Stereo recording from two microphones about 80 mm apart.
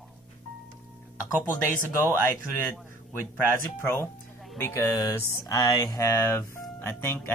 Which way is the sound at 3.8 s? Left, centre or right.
Left.